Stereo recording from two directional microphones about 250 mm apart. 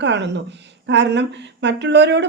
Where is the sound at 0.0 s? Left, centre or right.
Right.